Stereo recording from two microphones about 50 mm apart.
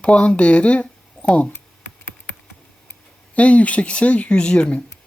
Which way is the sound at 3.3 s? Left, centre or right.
Left.